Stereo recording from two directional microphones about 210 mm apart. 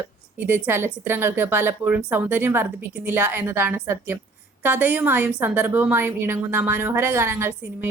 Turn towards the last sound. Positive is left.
turn(degrees=-10)  # may be behind; listen again after turning